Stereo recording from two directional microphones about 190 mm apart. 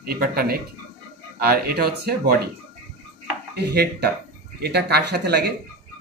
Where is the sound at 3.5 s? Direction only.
60° right (ahead or behind).